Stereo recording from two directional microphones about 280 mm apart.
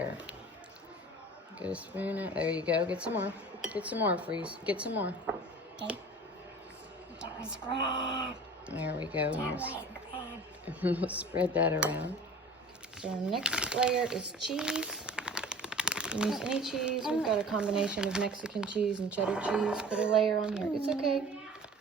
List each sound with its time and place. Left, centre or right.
1.5 s speech: centre
7.2 s a woman's voice: centre
7.7 s speech: centre
9.1 s speech: centre